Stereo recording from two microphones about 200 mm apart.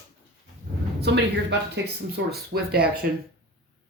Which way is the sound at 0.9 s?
55° right (ahead or behind).